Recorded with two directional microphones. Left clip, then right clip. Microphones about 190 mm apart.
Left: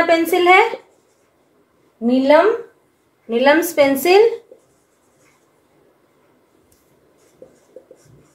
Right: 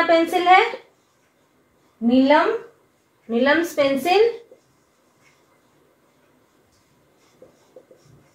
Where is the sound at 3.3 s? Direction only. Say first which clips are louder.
Left 5 dB; 60° left (ahead or behind).